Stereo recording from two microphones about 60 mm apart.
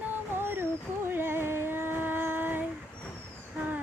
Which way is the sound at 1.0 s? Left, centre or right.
Right.